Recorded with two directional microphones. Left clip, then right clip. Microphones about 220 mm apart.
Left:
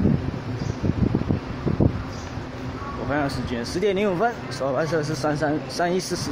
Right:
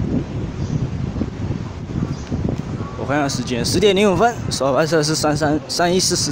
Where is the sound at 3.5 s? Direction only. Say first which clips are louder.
Right 8 dB; 25° right (ahead or behind).